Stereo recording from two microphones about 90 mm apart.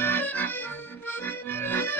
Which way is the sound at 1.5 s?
25° left (ahead or behind).